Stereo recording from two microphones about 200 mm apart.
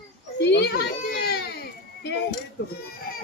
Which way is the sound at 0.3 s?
60° left (ahead or behind).